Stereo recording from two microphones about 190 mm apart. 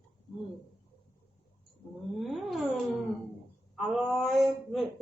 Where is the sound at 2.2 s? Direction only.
Centre (ahead or behind).